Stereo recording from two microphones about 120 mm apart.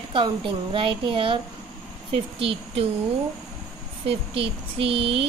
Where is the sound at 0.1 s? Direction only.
45° right (ahead or behind).